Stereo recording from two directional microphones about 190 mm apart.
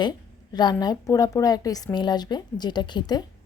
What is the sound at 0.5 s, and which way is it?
A woman's voice, 20° left (ahead or behind).